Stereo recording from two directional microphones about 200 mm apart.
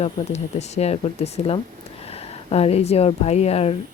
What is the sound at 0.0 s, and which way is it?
Speech, 35° left (ahead or behind).